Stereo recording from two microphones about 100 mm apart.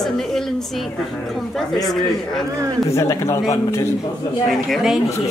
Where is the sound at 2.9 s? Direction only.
30° left (ahead or behind).